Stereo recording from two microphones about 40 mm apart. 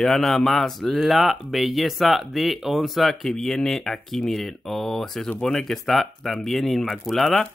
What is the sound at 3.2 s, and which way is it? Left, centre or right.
Speech, centre.